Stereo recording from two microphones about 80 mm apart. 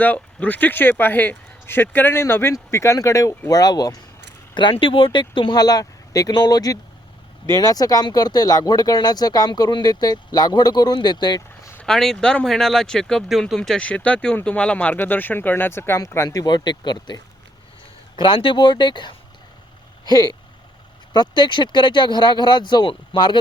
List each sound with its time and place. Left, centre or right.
0.0 s speech: centre; by 4.0 s left
4.5 s speech: left
5.5 s speech: left
11.8 s speech: centre; by 16.0 s left
16.0 s speech: left
16.4 s speech: left
18.2 s speech: left
20.1 s speech: left
21.1 s speech: left